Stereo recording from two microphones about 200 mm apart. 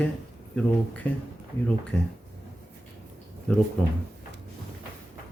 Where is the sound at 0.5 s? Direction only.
5° left (ahead or behind).